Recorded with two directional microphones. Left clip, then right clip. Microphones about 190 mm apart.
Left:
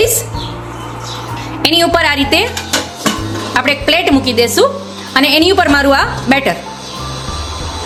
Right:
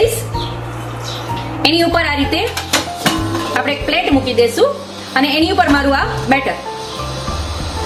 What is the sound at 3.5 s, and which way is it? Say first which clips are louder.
A woman's voice: left 6 dB; 60° left (ahead or behind).